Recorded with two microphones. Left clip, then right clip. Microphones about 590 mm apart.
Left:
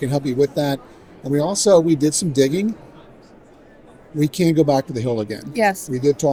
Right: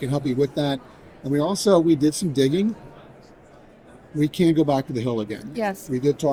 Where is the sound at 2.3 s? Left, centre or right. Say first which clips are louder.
Left 5 dB; left.